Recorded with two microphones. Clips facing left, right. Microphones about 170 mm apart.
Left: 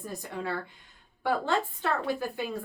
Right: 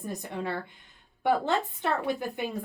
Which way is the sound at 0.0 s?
20° right (ahead or behind).